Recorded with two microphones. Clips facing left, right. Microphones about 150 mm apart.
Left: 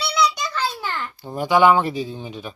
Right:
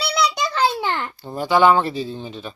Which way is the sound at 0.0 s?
35° right (ahead or behind).